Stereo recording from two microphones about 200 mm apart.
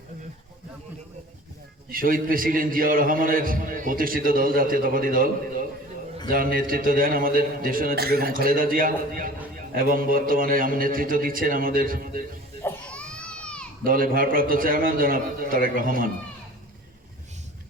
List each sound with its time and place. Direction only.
1.9 s a man's voice: 45° right (ahead or behind)
12.6 s baby cry: 5° left (ahead or behind)
13.8 s a man's voice: 45° right (ahead or behind)